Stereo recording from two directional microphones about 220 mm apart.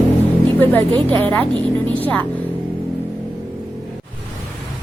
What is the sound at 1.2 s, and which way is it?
Speech, 5° left (ahead or behind).